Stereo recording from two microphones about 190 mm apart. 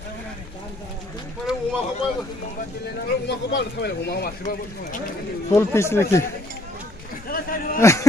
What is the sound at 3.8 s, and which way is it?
Speech, 60° left (ahead or behind).